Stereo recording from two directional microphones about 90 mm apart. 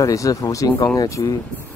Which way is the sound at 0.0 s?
40° left (ahead or behind).